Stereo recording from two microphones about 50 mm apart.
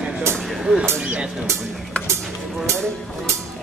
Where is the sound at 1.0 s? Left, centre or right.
Right.